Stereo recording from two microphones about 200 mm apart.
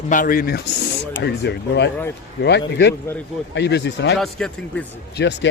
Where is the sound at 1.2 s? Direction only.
60° left (ahead or behind).